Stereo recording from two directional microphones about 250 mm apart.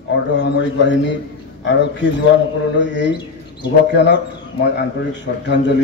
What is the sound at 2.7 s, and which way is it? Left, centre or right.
A man's voice, left.